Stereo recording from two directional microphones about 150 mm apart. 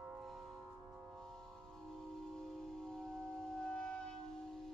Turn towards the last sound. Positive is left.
turn(degrees=5)  # may be behind; listen again after turning